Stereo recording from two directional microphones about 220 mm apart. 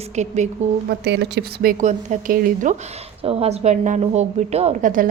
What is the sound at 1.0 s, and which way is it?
A woman's voice, 50° right (ahead or behind).